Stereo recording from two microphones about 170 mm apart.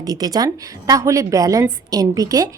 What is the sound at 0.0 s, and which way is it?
A woman's voice, 20° right (ahead or behind).